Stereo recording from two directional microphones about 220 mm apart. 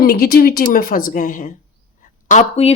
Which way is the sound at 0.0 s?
40° left (ahead or behind).